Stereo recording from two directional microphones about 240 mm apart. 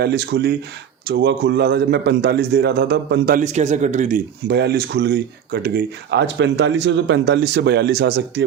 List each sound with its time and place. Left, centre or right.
0.0 s speech: right
4.4 s speech: right